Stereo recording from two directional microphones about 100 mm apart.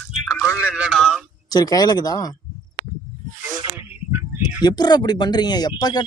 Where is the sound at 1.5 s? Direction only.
40° left (ahead or behind).